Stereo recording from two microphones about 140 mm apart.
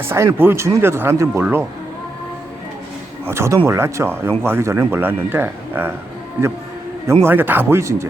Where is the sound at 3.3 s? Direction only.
20° right (ahead or behind).